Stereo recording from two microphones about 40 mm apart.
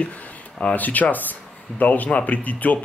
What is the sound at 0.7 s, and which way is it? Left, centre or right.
Speech, left.